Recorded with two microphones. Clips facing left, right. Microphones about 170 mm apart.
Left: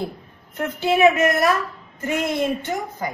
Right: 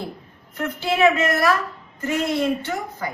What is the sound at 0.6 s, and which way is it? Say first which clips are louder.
A woman's voice: left 2 dB; 20° left (ahead or behind).